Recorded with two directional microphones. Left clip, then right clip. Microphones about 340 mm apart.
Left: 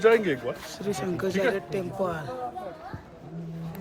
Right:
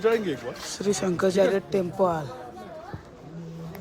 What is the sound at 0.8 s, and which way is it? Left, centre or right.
Speech, centre.